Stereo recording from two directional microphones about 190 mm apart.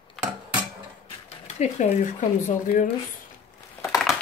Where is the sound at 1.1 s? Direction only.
35° left (ahead or behind).